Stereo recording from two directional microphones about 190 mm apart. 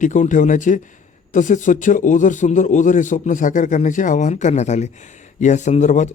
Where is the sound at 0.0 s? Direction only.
40° left (ahead or behind).